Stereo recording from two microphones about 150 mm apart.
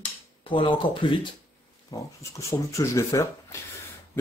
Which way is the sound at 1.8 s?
20° left (ahead or behind).